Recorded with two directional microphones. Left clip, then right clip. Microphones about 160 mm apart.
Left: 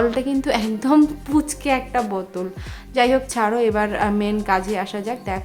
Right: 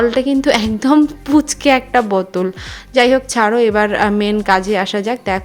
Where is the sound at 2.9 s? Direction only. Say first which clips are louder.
Right 6 dB; 30° right (ahead or behind).